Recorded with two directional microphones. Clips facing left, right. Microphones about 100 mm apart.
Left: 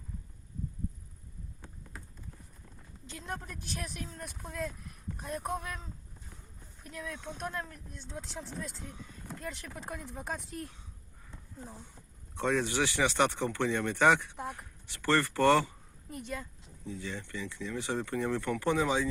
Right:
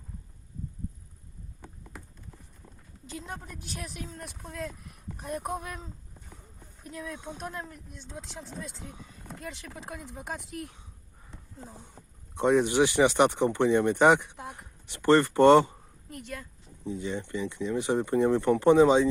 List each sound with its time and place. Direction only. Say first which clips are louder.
3.2 s speech: even; centre (ahead or behind)
6.8 s speech: right 3 dB; 30° right (ahead or behind)
7.1 s speech: left 1 dB; 15° right (ahead or behind)
9.5 s speech: even; centre (ahead or behind)
9.8 s speech: even; 15° right (ahead or behind)
10.1 s speech: right 1 dB; 5° right (ahead or behind)
12.3 s speech: right 7 dB; 15° right (ahead or behind)
16.8 s speech: right 7 dB; 20° right (ahead or behind)